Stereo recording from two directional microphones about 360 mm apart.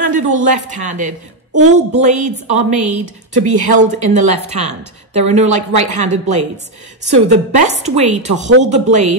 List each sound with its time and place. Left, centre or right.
0.1 s a woman's voice: right
5.7 s speech: right
7.1 s a woman's voice: centre